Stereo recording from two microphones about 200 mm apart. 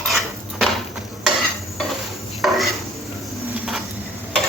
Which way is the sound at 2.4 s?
Centre (ahead or behind).